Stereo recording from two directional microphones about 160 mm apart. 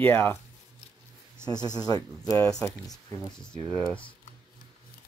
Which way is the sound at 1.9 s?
20° left (ahead or behind).